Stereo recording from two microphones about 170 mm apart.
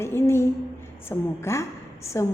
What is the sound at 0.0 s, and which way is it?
A woman's voice, 15° left (ahead or behind).